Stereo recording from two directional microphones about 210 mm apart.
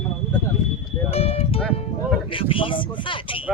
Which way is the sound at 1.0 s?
30° left (ahead or behind).